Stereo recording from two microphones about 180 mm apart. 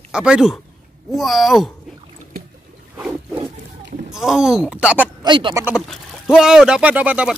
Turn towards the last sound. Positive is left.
turn(degrees=-5)  # may be behind; listen again after turning